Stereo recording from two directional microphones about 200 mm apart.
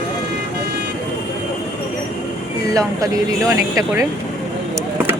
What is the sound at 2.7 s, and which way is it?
Speech, 15° right (ahead or behind).